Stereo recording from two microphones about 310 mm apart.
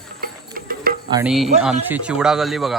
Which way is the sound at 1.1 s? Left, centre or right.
Centre.